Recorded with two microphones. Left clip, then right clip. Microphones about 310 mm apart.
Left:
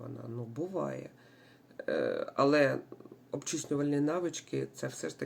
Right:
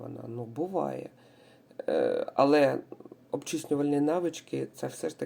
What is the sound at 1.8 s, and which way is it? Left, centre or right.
Speech, centre.